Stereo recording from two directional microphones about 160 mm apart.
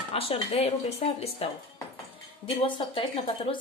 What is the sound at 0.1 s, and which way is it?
A woman's voice, 35° left (ahead or behind).